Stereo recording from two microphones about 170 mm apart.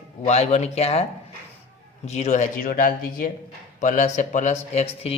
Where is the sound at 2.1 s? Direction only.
45° left (ahead or behind).